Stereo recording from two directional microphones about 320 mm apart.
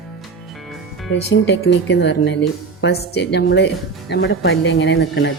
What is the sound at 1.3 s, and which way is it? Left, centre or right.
Speech, left.